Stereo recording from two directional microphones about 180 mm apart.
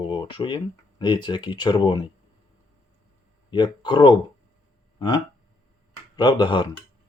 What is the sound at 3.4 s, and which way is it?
Speech, 25° left (ahead or behind).